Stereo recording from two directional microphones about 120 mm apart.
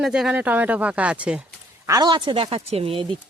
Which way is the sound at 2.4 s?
55° right (ahead or behind).